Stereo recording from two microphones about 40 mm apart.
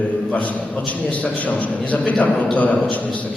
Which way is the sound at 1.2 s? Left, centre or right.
Left.